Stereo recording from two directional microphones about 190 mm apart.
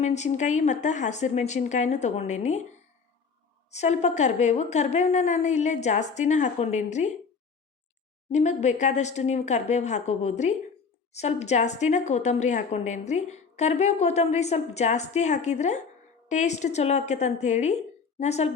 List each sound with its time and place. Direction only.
0.0 s a woman's voice: 35° left (ahead or behind)
8.3 s a woman's voice: 35° left (ahead or behind)